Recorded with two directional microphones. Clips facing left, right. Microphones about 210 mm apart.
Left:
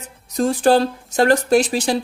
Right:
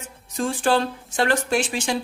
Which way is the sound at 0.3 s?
40° left (ahead or behind).